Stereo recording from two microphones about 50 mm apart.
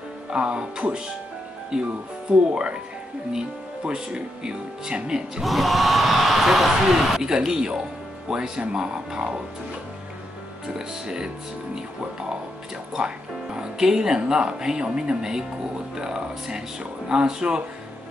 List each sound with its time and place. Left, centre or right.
0.3 s speech: right
5.4 s speech: centre
10.7 s speech: centre
13.6 s speech: centre